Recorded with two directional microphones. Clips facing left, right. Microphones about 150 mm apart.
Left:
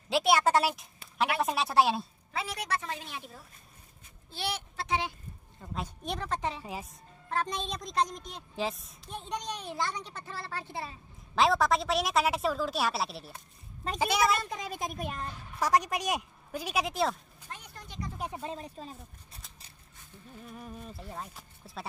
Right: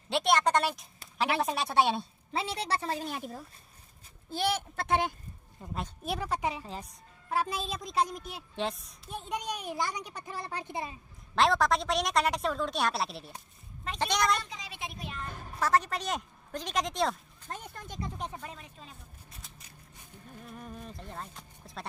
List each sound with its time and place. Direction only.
0.1 s a woman's voice: 5° left (ahead or behind)
2.3 s a woman's voice: 30° right (ahead or behind)
4.3 s speech: 45° right (ahead or behind)
5.8 s a woman's voice: 5° right (ahead or behind)
6.6 s a woman's voice: 5° left (ahead or behind)
7.2 s a woman's voice: 10° right (ahead or behind)
11.3 s a woman's voice: centre (ahead or behind)
14.4 s speech: 50° left (ahead or behind)
15.2 s speech: 50° right (ahead or behind)
15.6 s speech: 15° left (ahead or behind)
17.5 s speech: 45° right (ahead or behind)
18.3 s speech: 25° left (ahead or behind)
20.4 s a woman's voice: 5° left (ahead or behind)